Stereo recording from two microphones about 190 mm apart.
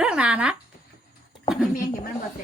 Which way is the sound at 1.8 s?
50° left (ahead or behind).